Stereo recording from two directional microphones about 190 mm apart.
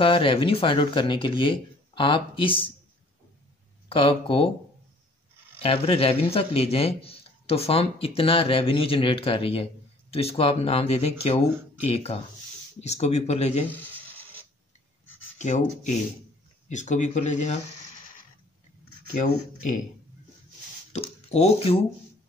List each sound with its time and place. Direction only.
0.0 s speech: 30° left (ahead or behind)
3.9 s speech: 30° left (ahead or behind)
5.6 s speech: 30° left (ahead or behind)
13.7 s a sound: 10° left (ahead or behind)
15.3 s speech: 40° left (ahead or behind)
20.9 s speech: 35° left (ahead or behind)